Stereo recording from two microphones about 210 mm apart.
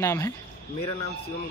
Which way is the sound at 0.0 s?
15° left (ahead or behind).